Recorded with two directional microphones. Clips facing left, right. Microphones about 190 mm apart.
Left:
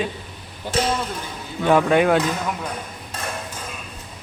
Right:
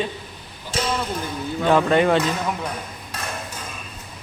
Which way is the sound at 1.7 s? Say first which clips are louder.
Left 1 dB; 10° left (ahead or behind).